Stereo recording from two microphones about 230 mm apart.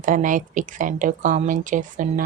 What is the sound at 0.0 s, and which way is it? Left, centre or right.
Speech, right.